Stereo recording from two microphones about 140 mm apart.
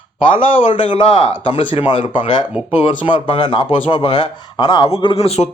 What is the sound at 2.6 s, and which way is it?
Speech, 10° right (ahead or behind).